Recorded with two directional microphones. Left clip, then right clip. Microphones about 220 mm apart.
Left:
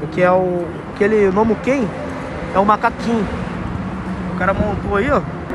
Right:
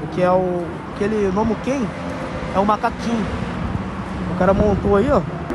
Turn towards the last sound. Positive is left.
turn(degrees=-20)  # may be behind; listen again after turning